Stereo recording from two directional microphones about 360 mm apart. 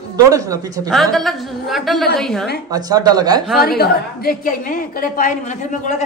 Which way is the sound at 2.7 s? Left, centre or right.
Centre.